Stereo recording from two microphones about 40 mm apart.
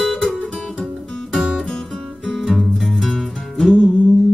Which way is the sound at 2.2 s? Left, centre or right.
Centre.